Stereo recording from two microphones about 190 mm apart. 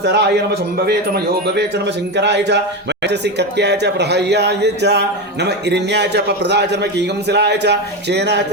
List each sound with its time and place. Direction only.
0.0 s speech: 60° right (ahead or behind)